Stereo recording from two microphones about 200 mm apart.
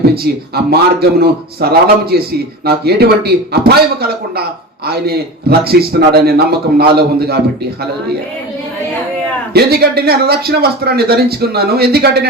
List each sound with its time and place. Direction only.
0.0 s speech: 50° right (ahead or behind)
9.5 s speech: 50° right (ahead or behind)